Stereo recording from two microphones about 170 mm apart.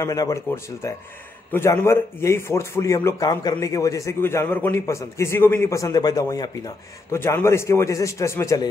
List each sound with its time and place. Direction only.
0.0 s a man's voice: 20° left (ahead or behind)